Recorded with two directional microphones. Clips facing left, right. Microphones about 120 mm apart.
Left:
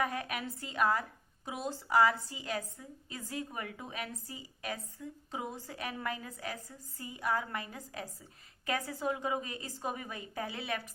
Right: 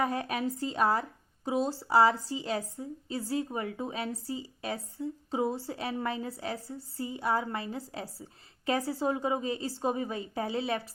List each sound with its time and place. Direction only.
0.0 s a woman's voice: 30° right (ahead or behind)